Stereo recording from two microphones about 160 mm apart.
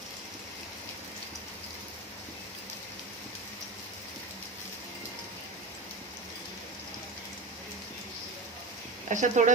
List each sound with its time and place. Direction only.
9.0 s speech: 50° right (ahead or behind)